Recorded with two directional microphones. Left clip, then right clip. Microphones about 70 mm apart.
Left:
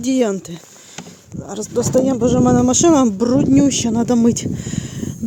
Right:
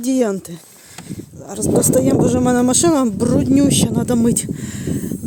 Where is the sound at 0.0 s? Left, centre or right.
Centre.